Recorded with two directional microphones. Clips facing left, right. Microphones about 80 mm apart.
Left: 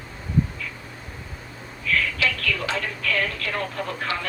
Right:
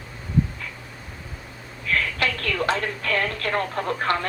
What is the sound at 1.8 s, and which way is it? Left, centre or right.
A woman's voice, right.